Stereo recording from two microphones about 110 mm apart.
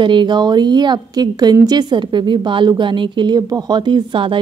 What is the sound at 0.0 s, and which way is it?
A woman's voice, 45° right (ahead or behind).